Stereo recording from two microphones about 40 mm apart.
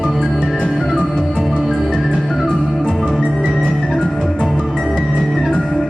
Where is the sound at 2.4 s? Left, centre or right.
Centre.